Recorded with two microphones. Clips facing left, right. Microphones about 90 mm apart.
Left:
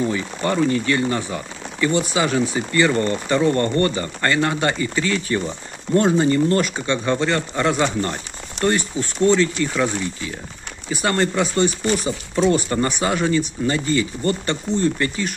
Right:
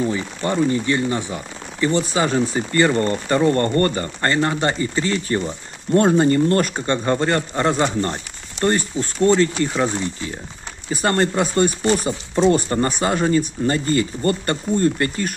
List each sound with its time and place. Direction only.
0.5 s speech: 25° right (ahead or behind)
1.8 s speech: 35° right (ahead or behind)
4.2 s speech: 30° right (ahead or behind)
10.9 s speech: 35° right (ahead or behind)